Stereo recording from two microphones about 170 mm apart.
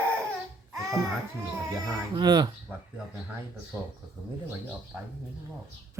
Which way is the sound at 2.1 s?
25° right (ahead or behind).